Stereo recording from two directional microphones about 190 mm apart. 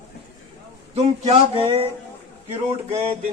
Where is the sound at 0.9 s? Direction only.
30° right (ahead or behind).